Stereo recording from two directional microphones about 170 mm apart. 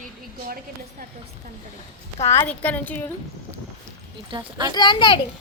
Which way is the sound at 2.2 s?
15° left (ahead or behind).